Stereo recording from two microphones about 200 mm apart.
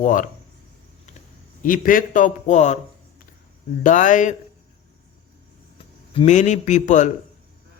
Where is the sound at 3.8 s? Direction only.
40° left (ahead or behind).